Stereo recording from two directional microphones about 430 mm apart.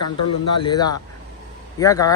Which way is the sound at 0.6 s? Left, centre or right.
Centre.